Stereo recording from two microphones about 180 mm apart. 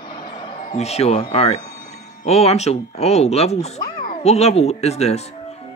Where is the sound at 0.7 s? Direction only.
35° left (ahead or behind).